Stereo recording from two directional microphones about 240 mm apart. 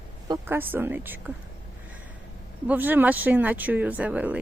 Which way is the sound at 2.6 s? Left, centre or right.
Centre.